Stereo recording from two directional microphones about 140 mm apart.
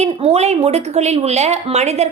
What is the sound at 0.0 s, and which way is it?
A woman's voice, 50° right (ahead or behind).